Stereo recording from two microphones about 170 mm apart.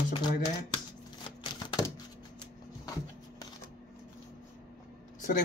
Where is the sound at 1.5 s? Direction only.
20° left (ahead or behind).